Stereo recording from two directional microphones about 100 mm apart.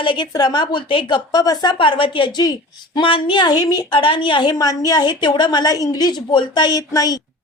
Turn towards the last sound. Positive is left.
turn(degrees=35)  # may be behind; listen again after turning